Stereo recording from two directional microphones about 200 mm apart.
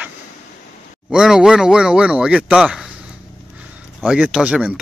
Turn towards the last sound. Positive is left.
turn(degrees=-5)  # may be behind; listen again after turning